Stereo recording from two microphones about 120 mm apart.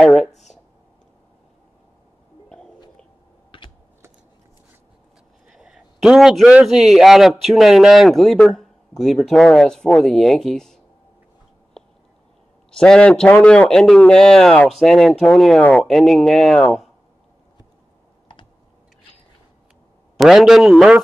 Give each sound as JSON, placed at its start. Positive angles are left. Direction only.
{"t": 0.0, "sound": "a sound", "side_deg": 0}
{"t": 0.3, "sound": "a sound", "side_deg": 75}
{"t": 3.5, "sound": "typing", "side_deg": 45}
{"t": 5.5, "sound": "a man's voice", "side_deg": -5}
{"t": 12.7, "sound": "a man's voice", "side_deg": 5}
{"t": 20.2, "sound": "a man's voice", "side_deg": -5}